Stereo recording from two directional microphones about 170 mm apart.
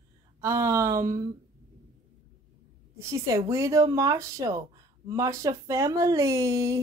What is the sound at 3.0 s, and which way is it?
Speech, 15° right (ahead or behind).